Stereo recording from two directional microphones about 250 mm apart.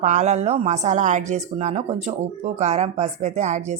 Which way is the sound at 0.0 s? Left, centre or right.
Right.